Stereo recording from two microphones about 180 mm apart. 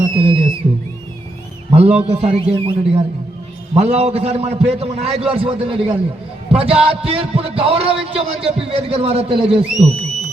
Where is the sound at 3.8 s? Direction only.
35° right (ahead or behind).